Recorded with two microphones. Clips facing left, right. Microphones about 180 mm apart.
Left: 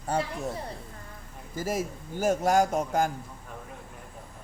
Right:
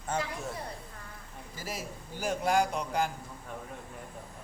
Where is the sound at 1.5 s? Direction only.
45° left (ahead or behind).